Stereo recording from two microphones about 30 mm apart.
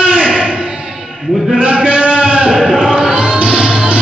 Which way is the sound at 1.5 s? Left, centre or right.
Right.